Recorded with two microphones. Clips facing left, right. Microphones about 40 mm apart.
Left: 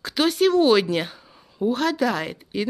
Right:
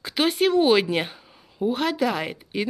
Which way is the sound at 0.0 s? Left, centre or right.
Centre.